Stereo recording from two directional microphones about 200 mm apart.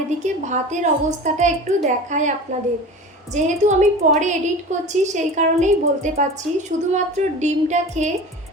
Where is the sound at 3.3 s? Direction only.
35° right (ahead or behind).